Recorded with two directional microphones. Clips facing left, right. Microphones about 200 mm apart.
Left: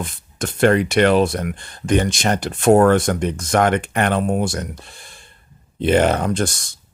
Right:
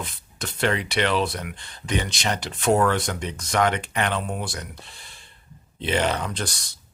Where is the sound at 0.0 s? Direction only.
50° left (ahead or behind).